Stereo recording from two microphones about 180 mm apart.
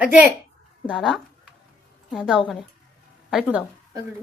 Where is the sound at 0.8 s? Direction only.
Centre (ahead or behind).